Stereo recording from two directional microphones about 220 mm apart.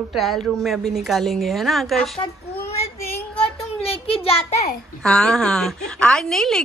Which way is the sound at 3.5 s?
25° left (ahead or behind).